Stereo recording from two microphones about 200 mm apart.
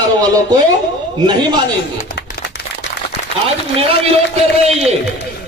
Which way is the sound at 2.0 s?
50° left (ahead or behind).